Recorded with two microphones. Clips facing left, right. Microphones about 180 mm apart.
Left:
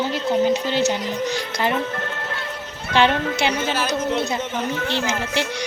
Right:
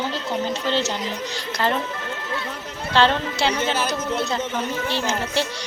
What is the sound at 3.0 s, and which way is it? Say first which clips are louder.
Speech: left 1 dB; 15° left (ahead or behind).